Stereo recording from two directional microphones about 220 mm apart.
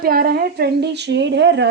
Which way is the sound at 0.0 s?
45° right (ahead or behind).